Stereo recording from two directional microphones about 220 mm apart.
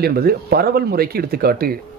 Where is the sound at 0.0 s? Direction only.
45° right (ahead or behind).